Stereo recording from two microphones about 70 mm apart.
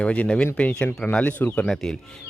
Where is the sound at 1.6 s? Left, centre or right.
Centre.